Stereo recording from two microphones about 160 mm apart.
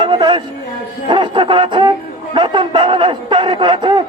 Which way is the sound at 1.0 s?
30° right (ahead or behind).